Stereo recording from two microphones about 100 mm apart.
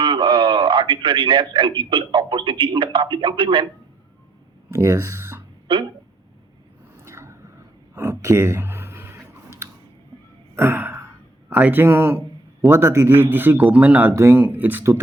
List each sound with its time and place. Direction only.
0.0 s a man's voice: 55° right (ahead or behind)
4.7 s speech: 25° right (ahead or behind)
6.9 s a sound: 25° right (ahead or behind)
7.9 s clicking: 25° right (ahead or behind)
10.5 s gasp: 25° right (ahead or behind)
12.6 s a man's voice: 25° right (ahead or behind)
14.1 s a man's voice: 30° right (ahead or behind)